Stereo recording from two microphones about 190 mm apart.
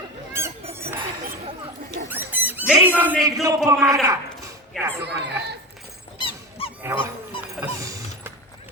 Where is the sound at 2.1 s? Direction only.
10° right (ahead or behind).